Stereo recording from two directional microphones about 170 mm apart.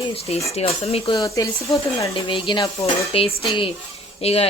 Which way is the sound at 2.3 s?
30° left (ahead or behind).